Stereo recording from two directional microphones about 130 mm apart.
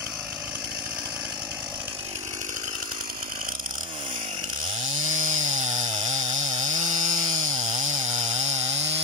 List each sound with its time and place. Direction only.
5.0 s chainsaw: 80° right; by 9.0 s 55° right (ahead or behind)